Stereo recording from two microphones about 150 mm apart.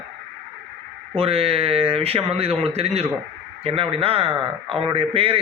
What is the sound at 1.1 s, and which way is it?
Speech, 40° right (ahead or behind).